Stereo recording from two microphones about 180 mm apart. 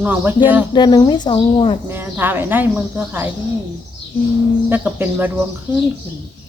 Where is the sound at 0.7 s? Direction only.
25° left (ahead or behind).